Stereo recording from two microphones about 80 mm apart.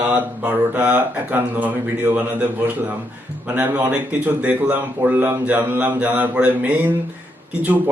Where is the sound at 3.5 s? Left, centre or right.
Right.